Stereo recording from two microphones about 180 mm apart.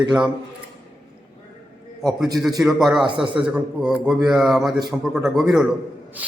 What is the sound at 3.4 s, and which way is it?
A man's voice, 5° right (ahead or behind).